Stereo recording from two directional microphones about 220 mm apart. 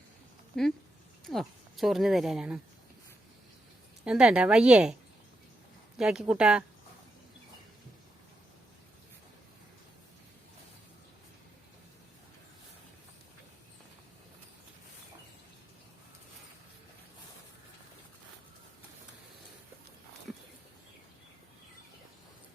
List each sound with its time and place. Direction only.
0.5 s speech: centre (ahead or behind)
4.0 s speech: 5° right (ahead or behind)
6.0 s speech: 5° right (ahead or behind)